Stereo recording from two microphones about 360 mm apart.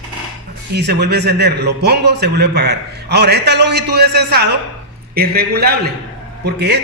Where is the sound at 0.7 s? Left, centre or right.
Right.